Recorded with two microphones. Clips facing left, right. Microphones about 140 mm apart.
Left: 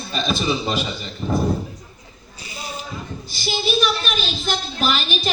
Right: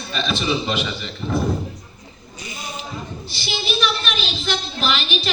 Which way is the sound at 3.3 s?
45° left (ahead or behind).